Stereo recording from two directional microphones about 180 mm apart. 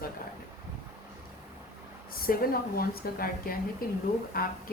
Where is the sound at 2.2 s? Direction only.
55° left (ahead or behind).